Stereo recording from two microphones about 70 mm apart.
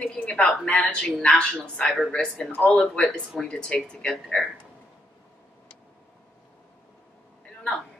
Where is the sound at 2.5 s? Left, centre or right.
Left.